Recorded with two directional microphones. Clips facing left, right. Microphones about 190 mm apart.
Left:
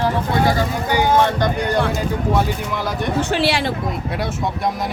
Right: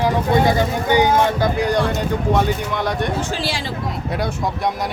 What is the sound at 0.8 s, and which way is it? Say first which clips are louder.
Speech: right 4 dB; 20° right (ahead or behind).